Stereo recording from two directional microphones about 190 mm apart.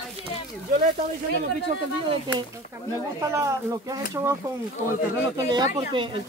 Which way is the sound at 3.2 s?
15° right (ahead or behind).